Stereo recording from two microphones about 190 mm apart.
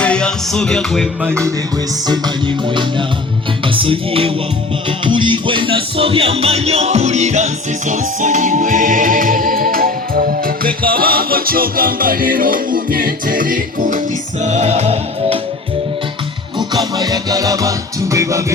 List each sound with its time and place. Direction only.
0.0 s music: 5° left (ahead or behind)
2.0 s music: 25° right (ahead or behind)
16.6 s music: 20° right (ahead or behind)